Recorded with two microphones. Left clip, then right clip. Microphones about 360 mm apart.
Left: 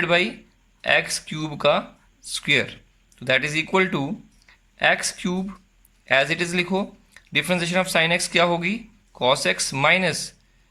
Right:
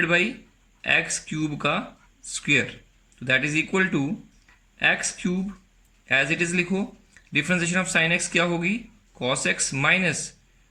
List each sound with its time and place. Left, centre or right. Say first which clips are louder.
0.0 s speech: left 1 dB; centre